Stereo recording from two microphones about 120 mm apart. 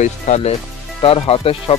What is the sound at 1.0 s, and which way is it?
Speech, 55° left (ahead or behind).